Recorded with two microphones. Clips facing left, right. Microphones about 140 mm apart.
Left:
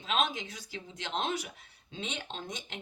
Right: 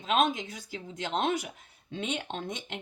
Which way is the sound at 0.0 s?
50° right (ahead or behind).